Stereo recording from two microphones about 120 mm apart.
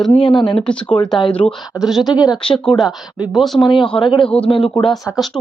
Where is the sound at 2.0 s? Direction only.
35° left (ahead or behind).